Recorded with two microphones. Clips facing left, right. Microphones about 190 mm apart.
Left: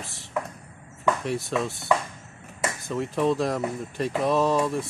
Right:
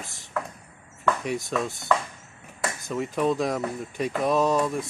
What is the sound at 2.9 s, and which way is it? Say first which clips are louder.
Speech: left 1 dB; centre (ahead or behind).